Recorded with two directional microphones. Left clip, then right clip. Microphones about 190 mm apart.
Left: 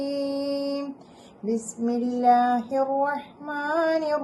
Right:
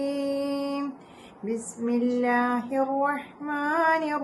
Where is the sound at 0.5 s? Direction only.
Centre (ahead or behind).